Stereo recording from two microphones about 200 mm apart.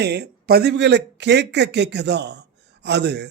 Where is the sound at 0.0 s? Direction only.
55° right (ahead or behind).